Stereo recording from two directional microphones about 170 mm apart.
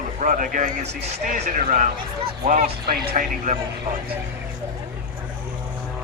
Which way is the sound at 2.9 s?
55° right (ahead or behind).